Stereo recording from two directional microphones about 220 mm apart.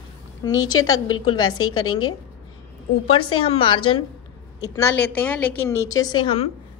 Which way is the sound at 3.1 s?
25° left (ahead or behind).